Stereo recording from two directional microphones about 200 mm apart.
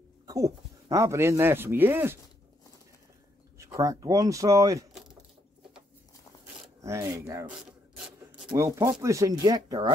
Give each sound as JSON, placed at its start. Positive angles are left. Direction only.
{"t": 0.3, "sound": "speech", "side_deg": -15}
{"t": 3.5, "sound": "speech", "side_deg": -15}
{"t": 6.8, "sound": "speech", "side_deg": -15}
{"t": 8.5, "sound": "speech", "side_deg": -15}